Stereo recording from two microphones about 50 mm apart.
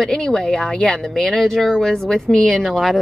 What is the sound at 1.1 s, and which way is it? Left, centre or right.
Speech, centre.